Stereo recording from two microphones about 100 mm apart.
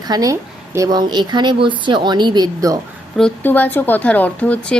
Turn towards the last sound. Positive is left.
turn(degrees=15)  # may be behind; listen again after turning